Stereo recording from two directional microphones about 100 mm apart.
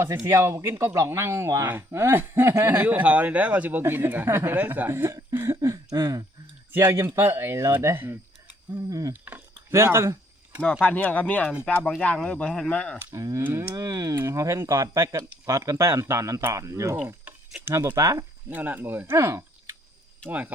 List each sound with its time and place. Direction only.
0.3 s speech: 30° right (ahead or behind)
5.6 s a sound: 35° right (ahead or behind)
6.7 s speech: 25° right (ahead or behind)
9.2 s a sound: 20° right (ahead or behind)
10.6 s speech: 10° left (ahead or behind)
13.1 s speech: 30° right (ahead or behind)
18.4 s speech: 20° right (ahead or behind)